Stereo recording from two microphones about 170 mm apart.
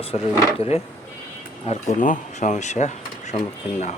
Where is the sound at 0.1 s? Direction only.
40° left (ahead or behind).